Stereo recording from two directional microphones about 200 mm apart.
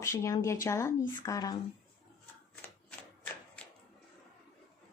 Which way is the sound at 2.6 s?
10° left (ahead or behind).